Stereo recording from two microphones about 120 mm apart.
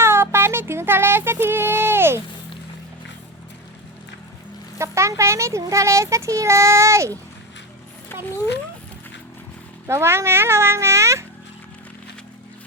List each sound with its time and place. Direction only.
0.0 s music: 20° right (ahead or behind)
4.8 s speech: 25° right (ahead or behind)
9.8 s speech: 20° right (ahead or behind)